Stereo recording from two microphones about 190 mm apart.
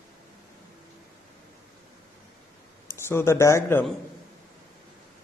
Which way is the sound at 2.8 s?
15° left (ahead or behind).